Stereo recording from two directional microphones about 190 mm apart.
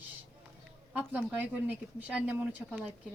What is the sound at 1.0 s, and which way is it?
Speech, 10° right (ahead or behind).